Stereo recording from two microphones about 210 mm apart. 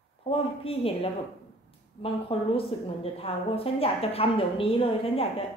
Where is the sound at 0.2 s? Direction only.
25° left (ahead or behind).